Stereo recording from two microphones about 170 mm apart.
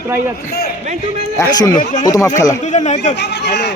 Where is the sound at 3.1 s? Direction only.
90° left.